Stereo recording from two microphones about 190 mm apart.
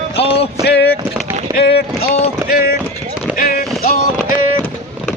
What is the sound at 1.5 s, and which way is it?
Speech, 55° left (ahead or behind).